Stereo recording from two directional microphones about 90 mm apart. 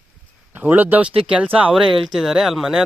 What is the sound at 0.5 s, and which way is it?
Speech, 20° right (ahead or behind).